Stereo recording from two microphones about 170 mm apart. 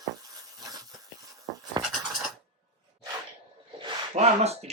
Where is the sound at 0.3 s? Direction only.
20° right (ahead or behind).